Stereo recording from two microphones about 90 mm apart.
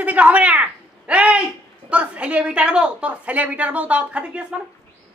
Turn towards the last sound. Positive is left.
turn(degrees=-10)  # may be behind; listen again after turning